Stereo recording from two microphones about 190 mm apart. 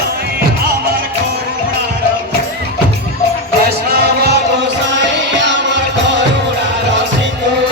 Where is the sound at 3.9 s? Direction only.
60° right (ahead or behind).